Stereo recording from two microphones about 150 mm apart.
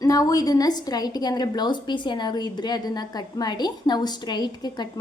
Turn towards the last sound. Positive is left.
turn(degrees=30)  # may be behind; listen again after turning